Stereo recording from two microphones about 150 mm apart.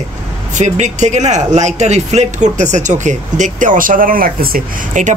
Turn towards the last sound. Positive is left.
turn(degrees=-65)  # may be behind; listen again after turning